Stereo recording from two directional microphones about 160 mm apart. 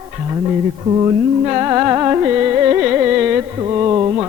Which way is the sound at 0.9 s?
25° right (ahead or behind).